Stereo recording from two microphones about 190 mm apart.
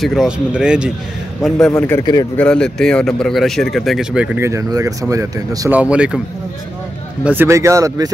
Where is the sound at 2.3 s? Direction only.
5° left (ahead or behind); by 5.7 s 15° right (ahead or behind).